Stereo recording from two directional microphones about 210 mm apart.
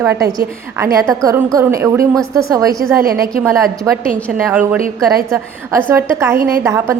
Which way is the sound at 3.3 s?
15° right (ahead or behind).